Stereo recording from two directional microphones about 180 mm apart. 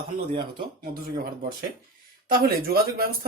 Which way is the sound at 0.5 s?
55° right (ahead or behind).